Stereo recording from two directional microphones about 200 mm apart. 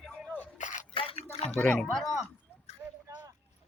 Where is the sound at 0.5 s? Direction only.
40° left (ahead or behind).